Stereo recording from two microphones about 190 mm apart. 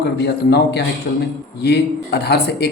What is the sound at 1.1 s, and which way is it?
Speech, 50° left (ahead or behind).